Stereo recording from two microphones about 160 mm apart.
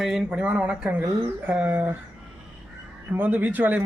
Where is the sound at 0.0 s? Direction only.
5° right (ahead or behind).